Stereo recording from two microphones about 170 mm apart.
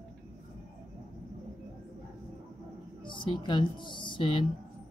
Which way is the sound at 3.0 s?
30° left (ahead or behind).